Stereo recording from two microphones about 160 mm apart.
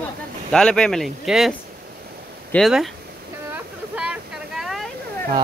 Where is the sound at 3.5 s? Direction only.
5° right (ahead or behind).